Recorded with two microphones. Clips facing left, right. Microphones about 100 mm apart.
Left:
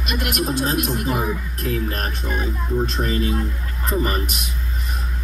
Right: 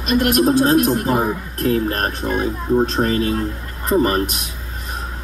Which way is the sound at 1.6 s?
50° right (ahead or behind).